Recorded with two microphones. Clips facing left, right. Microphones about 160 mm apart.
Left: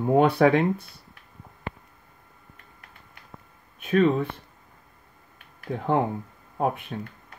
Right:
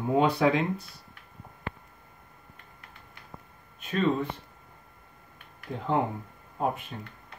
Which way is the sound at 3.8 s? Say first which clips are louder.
Left 6 dB; 55° left (ahead or behind).